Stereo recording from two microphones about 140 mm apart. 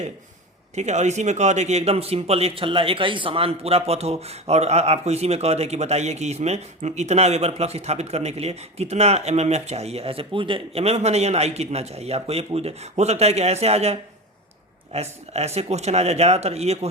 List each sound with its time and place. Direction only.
0.8 s speech: 55° right (ahead or behind)